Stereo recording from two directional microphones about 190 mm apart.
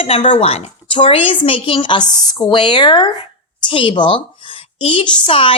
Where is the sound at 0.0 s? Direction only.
30° left (ahead or behind).